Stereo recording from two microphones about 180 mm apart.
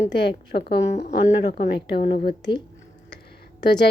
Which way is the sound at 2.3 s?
25° left (ahead or behind).